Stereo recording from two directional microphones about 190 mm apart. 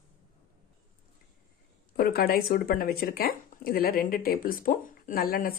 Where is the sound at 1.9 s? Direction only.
55° left (ahead or behind).